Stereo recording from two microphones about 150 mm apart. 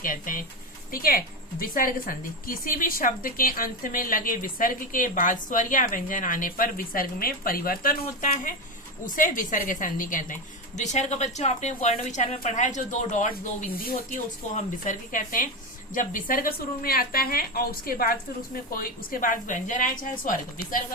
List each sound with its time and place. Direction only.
0.0 s a woman's voice: 65° left (ahead or behind)
9.0 s speech: 65° left (ahead or behind)
10.8 s a woman's voice: 50° left (ahead or behind)